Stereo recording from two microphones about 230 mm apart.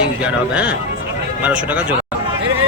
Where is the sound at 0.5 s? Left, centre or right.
Centre.